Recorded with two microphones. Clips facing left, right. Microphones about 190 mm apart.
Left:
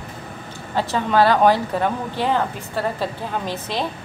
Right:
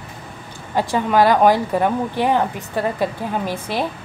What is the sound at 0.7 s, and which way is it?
A woman's voice, 15° right (ahead or behind).